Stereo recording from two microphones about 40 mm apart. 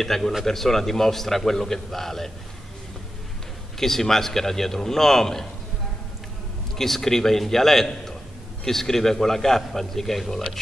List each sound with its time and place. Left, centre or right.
0.0 s a man's voice: centre
3.8 s a man's voice: centre
6.8 s a man's voice: centre